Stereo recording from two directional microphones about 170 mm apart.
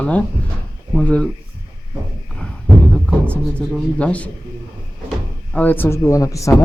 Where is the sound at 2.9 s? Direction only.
5° left (ahead or behind).